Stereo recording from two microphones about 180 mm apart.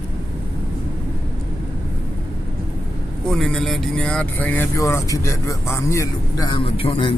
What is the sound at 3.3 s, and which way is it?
Speech, centre (ahead or behind).